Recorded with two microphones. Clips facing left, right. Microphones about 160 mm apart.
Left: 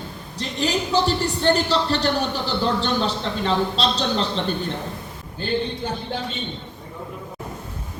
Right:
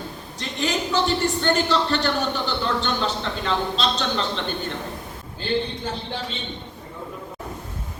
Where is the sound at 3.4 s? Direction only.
35° left (ahead or behind).